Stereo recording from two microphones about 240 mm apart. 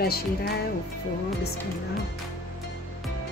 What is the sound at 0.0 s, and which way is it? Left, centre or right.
Speech, left.